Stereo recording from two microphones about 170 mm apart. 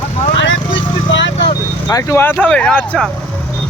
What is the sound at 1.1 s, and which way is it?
Vehicle, 90° left.